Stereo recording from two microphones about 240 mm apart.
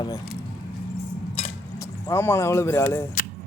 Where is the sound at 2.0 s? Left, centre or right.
Centre.